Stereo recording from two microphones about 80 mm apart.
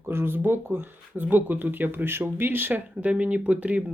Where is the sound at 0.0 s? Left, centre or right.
Right.